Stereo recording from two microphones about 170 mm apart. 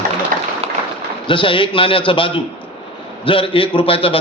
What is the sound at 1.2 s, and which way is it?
A man's voice, 30° left (ahead or behind).